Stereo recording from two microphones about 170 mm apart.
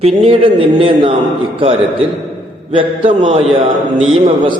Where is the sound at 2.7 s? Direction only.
30° right (ahead or behind).